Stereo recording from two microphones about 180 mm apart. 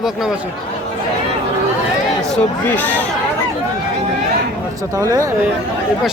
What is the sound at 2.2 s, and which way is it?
Speech, 5° left (ahead or behind).